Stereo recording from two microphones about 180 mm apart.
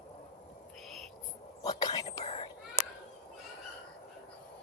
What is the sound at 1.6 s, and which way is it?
Whispering, 20° left (ahead or behind).